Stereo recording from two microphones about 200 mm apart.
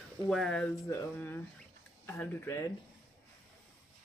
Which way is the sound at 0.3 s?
Centre (ahead or behind).